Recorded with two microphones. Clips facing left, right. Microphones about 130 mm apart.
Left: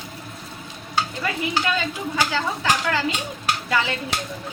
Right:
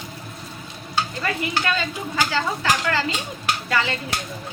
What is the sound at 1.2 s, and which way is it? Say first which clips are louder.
Speech: even; 10° left (ahead or behind).